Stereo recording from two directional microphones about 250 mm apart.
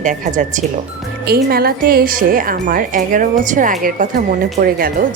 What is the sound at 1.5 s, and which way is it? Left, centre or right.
Speech, right.